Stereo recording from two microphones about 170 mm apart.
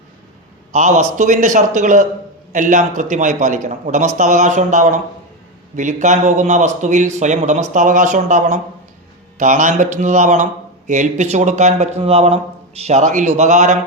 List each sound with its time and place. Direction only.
0.7 s a man's voice: 45° right (ahead or behind)